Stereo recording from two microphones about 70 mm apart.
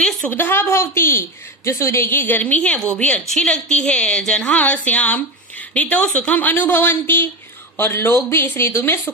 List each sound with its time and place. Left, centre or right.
0.0 s a sound: centre
0.3 s a woman's voice: left
2.0 s a woman's voice: left